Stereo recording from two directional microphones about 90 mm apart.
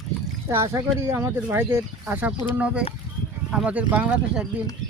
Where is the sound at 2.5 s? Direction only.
15° right (ahead or behind).